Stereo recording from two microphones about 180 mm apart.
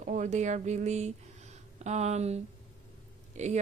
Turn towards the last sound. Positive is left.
turn(degrees=-40)  # may be behind; listen again after turning